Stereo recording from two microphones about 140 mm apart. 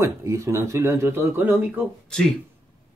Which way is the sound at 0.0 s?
20° right (ahead or behind).